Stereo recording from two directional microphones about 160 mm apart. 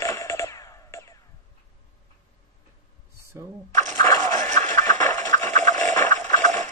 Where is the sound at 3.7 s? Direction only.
50° right (ahead or behind).